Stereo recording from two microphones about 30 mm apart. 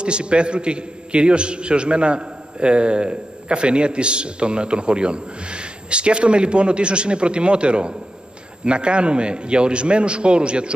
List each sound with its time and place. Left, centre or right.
0.0 s a man's voice: right